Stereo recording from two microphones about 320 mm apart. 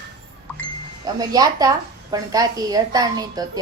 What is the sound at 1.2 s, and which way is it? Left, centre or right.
A woman's voice, centre.